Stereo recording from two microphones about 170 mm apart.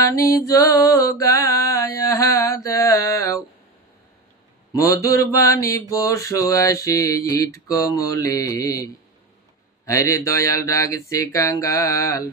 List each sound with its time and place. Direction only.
0.0 s music: 20° left (ahead or behind)
4.7 s mantra: 20° left (ahead or behind)
9.8 s mantra: 20° left (ahead or behind)